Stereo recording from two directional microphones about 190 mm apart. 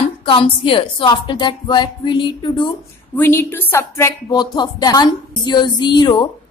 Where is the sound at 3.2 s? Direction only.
10° left (ahead or behind).